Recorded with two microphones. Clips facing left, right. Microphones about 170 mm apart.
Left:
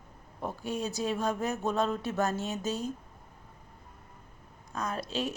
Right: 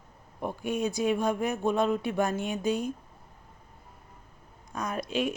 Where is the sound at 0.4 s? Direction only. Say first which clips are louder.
Right 4 dB; 15° right (ahead or behind).